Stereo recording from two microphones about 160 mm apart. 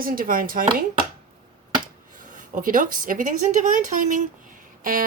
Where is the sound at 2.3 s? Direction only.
55° right (ahead or behind).